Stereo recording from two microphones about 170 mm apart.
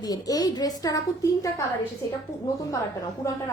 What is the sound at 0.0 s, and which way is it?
A woman's voice, 20° left (ahead or behind).